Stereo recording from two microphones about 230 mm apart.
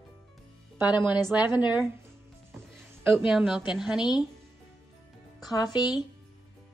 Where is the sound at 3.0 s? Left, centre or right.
Centre.